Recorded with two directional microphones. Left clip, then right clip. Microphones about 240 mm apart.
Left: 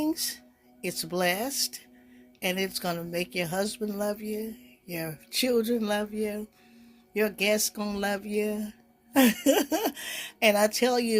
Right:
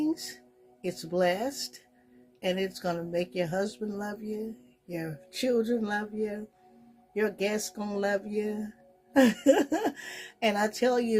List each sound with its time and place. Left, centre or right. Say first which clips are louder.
0.8 s speech: right 1 dB; left